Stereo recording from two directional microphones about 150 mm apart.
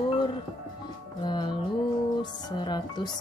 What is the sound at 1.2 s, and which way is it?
Speech, 30° left (ahead or behind).